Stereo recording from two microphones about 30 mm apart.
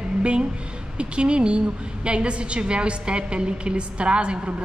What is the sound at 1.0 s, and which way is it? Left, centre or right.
A woman's voice, right.